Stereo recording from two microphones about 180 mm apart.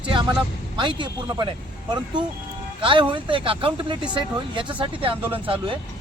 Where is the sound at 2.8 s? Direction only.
30° right (ahead or behind).